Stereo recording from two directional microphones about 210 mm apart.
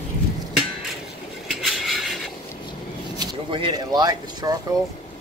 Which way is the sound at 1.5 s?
Centre (ahead or behind).